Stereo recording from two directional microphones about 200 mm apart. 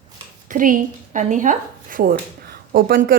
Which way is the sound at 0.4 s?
40° right (ahead or behind).